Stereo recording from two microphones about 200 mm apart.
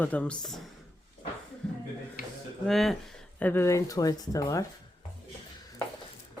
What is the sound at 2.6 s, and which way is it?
Speech, centre (ahead or behind).